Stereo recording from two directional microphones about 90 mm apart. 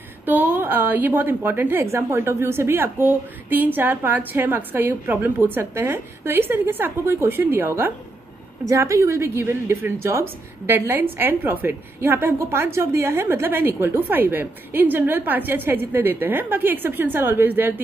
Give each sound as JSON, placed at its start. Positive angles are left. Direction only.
{"t": 0.2, "sound": "a woman's voice", "side_deg": -20}
{"t": 8.6, "sound": "a woman's voice", "side_deg": -35}